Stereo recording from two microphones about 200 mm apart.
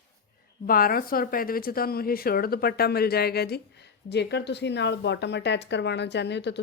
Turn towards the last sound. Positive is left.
turn(degrees=60)  # may be behind; listen again after turning